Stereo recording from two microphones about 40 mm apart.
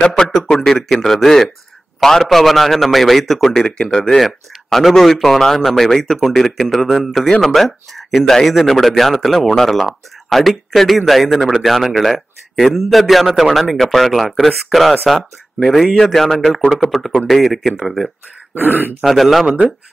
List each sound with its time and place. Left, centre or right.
0.0 s a man's voice: centre
3.6 s speech: left
3.9 s a man's voice: centre
16.0 s speech: centre
18.5 s speech: right
19.0 s speech: centre